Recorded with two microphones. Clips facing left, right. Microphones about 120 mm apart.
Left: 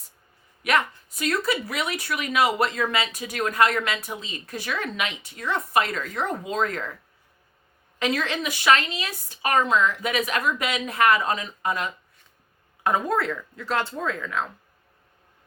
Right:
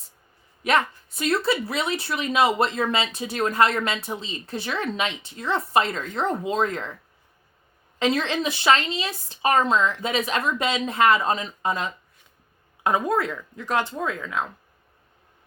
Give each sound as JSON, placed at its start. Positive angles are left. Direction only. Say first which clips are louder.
{"t": 0.6, "sound": "speech", "louder": "right 1 dB", "side_deg": -30}
{"t": 7.9, "sound": "speech", "louder": "right 3 dB", "side_deg": -25}
{"t": 12.8, "sound": "speech", "louder": "right 1 dB", "side_deg": -15}